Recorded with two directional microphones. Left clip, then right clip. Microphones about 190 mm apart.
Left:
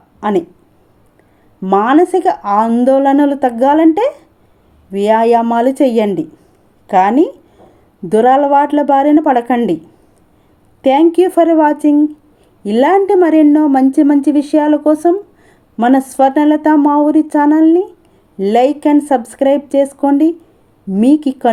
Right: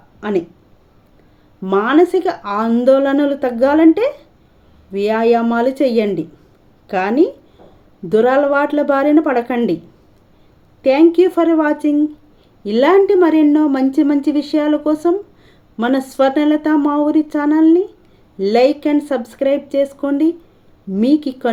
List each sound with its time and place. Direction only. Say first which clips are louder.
0.2 s speech: left 4 dB; 20° left (ahead or behind)
1.6 s a woman's voice: left 3 dB; 15° left (ahead or behind)
11.1 s a woman's voice: left 3 dB; 20° left (ahead or behind)